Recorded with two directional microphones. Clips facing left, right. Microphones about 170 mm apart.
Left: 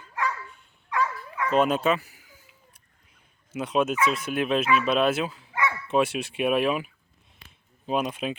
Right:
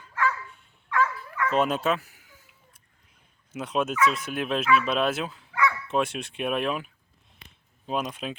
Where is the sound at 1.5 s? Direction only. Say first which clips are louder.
Left 2 dB; centre (ahead or behind).